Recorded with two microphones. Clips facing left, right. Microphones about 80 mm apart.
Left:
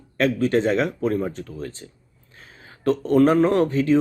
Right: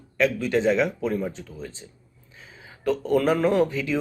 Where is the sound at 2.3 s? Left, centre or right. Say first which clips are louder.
Even; left.